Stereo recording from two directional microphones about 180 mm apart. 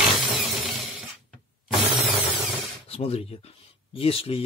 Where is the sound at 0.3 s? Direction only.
Centre (ahead or behind).